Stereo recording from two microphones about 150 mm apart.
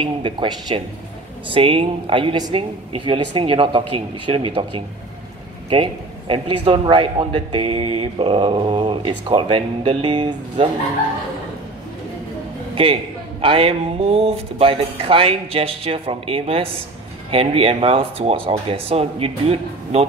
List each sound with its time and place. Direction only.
0.0 s a man's voice: 30° right (ahead or behind)
12.7 s a man's voice: 35° right (ahead or behind)